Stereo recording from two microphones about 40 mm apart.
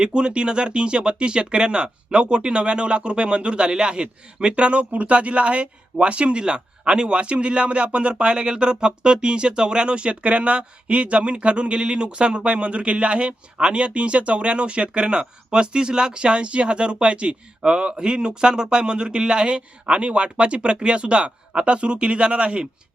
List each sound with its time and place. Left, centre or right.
0.0 s speech: right